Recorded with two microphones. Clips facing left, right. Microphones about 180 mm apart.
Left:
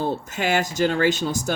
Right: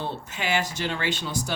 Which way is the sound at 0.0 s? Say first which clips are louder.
Left 7 dB; 45° left (ahead or behind).